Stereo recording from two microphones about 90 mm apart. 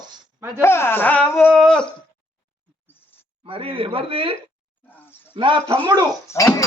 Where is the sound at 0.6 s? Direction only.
30° left (ahead or behind).